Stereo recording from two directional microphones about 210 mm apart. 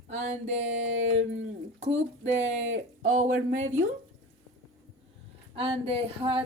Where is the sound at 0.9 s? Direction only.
65° right (ahead or behind).